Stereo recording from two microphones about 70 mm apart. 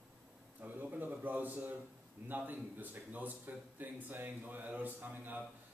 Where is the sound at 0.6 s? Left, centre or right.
Right.